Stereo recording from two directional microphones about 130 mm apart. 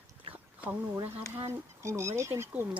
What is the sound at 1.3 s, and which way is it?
Speech, 20° right (ahead or behind).